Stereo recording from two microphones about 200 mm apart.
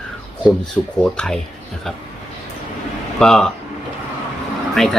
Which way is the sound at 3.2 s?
5° left (ahead or behind).